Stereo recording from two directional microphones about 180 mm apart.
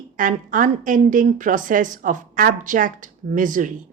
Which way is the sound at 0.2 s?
50° right (ahead or behind).